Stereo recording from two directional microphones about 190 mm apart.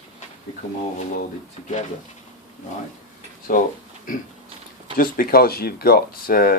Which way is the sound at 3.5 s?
45° left (ahead or behind).